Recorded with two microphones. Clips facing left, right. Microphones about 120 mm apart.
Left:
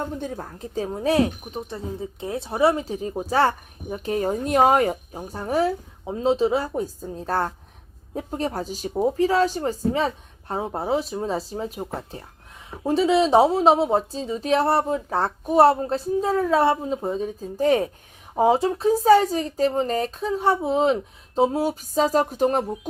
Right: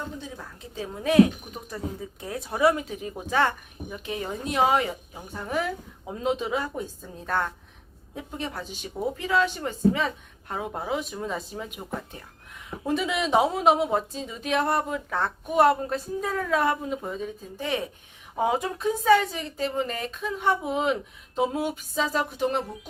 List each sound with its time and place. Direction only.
0.0 s speech: 50° left (ahead or behind)